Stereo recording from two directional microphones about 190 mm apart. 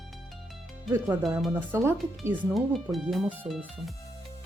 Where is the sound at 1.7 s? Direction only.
15° right (ahead or behind).